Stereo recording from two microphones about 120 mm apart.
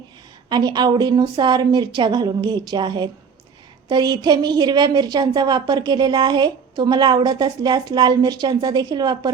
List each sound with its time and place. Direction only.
0.5 s a woman's voice: 35° right (ahead or behind)